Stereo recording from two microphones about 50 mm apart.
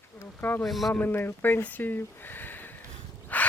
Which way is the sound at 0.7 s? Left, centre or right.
Centre.